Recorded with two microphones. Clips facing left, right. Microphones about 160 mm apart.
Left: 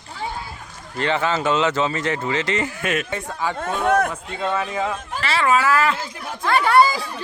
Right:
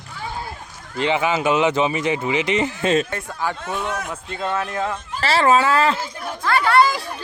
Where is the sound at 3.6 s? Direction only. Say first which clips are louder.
Left 7 dB; 55° left (ahead or behind).